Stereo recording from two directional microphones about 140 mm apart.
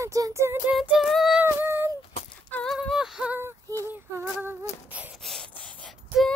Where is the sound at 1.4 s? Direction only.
15° right (ahead or behind).